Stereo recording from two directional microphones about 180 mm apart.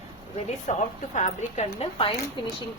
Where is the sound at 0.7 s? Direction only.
40° left (ahead or behind).